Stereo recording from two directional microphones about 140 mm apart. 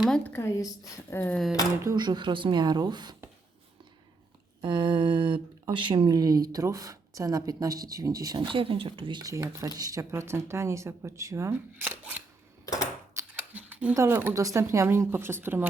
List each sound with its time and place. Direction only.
0.3 s a woman's voice: 20° left (ahead or behind)
1.8 s speech: 30° right (ahead or behind)
4.6 s speech: 35° right (ahead or behind); by 12.2 s 15° right (ahead or behind)
13.1 s a sound: 10° right (ahead or behind)
13.9 s speech: 15° right (ahead or behind)